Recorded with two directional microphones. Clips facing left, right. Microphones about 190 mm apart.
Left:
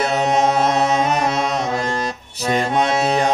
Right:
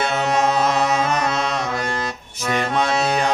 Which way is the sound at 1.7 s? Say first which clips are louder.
Left 3 dB; 35° left (ahead or behind).